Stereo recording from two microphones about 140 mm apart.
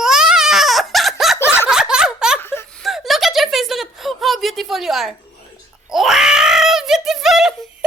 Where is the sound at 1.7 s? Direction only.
5° right (ahead or behind).